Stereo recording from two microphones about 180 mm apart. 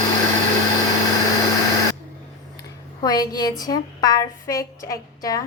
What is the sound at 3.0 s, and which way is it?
A woman's voice, 20° left (ahead or behind).